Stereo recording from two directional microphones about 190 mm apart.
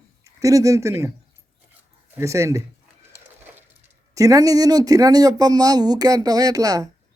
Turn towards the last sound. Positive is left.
turn(degrees=-20)  # may be behind; listen again after turning